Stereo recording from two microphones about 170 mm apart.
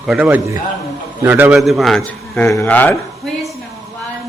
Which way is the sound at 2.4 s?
15° left (ahead or behind).